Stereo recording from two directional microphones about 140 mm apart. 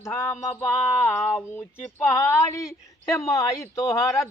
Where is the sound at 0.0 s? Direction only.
20° left (ahead or behind).